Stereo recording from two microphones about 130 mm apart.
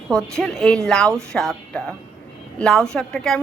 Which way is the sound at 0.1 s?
5° left (ahead or behind).